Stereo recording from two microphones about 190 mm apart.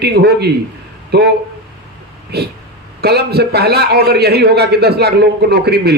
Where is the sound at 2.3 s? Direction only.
60° right (ahead or behind).